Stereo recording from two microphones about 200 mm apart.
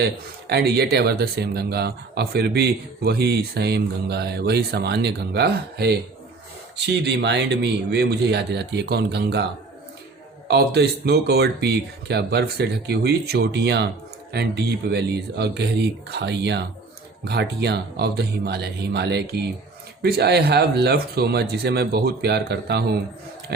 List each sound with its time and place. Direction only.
0.0 s speech: 55° right (ahead or behind)
10.5 s speech: 55° right (ahead or behind)